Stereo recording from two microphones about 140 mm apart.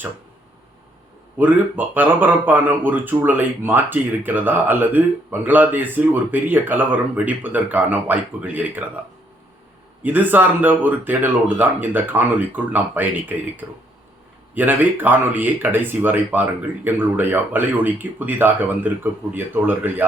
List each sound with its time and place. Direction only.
1.4 s speech: 10° right (ahead or behind)
10.0 s speech: 15° right (ahead or behind)